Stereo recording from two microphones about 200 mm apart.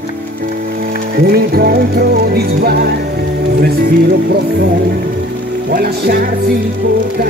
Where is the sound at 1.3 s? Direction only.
50° right (ahead or behind).